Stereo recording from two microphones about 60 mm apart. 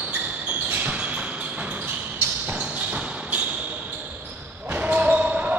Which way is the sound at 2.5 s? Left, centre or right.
Right.